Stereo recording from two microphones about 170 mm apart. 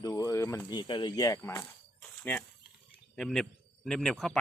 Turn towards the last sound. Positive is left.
turn(degrees=0)  # may be behind; listen again after turning